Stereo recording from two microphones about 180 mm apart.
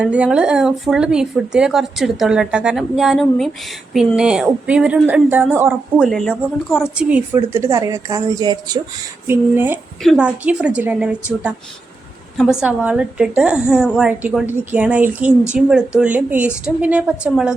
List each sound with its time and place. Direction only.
0.0 s a woman's voice: 5° right (ahead or behind)
6.1 s a woman's voice: centre (ahead or behind)
12.4 s a woman's voice: 5° right (ahead or behind)